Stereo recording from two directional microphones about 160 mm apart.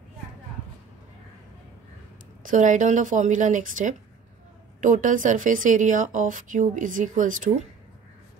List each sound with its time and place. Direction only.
2.4 s speech: 50° right (ahead or behind)